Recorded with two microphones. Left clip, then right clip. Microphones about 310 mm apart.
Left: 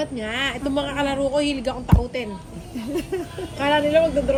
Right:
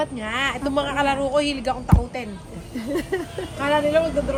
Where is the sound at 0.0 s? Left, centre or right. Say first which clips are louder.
Right 1 dB; centre.